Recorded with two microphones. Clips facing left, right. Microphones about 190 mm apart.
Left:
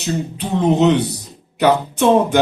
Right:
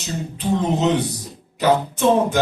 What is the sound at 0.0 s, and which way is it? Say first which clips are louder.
Speech: left 4 dB; 65° left (ahead or behind).